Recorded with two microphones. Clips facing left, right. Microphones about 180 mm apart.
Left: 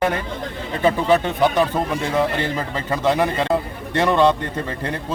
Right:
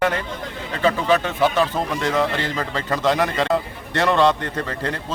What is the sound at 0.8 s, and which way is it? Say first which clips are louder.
A man's voice: left 2 dB; 20° left (ahead or behind).